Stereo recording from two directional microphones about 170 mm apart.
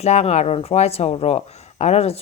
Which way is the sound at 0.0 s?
40° left (ahead or behind).